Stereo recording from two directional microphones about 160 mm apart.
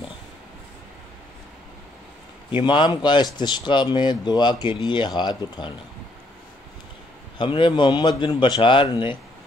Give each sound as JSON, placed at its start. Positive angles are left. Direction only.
{"t": 2.6, "sound": "speech", "side_deg": 30}
{"t": 7.3, "sound": "speech", "side_deg": 30}